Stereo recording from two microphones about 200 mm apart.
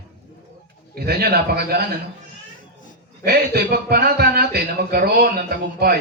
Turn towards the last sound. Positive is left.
turn(degrees=-50)  # may be behind; listen again after turning